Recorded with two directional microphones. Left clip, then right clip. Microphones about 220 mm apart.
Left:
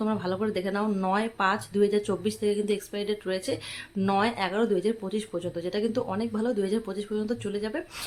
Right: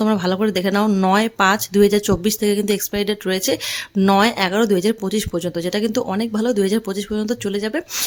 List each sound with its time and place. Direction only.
0.0 s speech: 45° right (ahead or behind)